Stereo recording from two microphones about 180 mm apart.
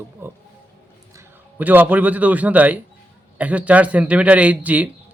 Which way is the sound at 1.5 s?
10° right (ahead or behind).